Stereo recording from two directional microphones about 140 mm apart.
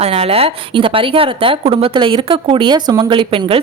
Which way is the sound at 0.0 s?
45° right (ahead or behind).